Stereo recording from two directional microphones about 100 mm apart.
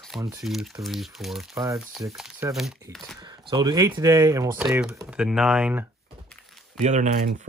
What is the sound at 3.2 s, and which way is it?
Speech, 50° right (ahead or behind).